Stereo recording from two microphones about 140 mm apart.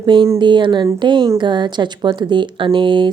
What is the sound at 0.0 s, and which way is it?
Speech, 35° right (ahead or behind).